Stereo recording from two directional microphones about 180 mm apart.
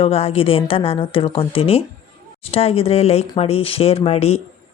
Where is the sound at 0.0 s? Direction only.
35° left (ahead or behind).